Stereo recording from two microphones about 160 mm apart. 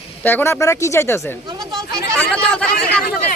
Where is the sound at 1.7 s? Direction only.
20° right (ahead or behind).